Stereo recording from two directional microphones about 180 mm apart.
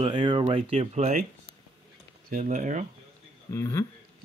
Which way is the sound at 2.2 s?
45° right (ahead or behind).